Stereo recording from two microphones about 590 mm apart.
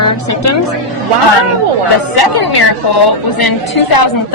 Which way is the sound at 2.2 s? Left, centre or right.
Left.